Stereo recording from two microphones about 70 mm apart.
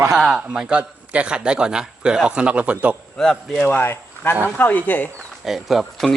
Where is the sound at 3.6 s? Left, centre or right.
Left.